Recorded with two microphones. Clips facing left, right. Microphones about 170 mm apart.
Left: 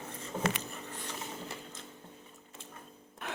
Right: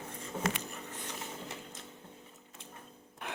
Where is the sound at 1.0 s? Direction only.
20° right (ahead or behind).